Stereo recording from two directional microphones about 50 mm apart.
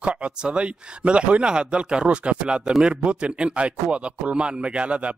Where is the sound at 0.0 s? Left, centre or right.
Right.